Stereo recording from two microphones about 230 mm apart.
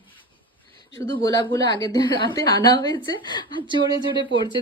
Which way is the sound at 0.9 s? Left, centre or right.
Centre.